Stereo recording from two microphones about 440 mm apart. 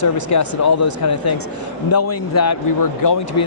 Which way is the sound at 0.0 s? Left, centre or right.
Left.